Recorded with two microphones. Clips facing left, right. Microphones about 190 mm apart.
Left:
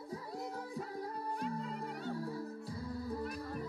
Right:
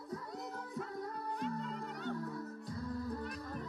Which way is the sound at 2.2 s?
30° left (ahead or behind).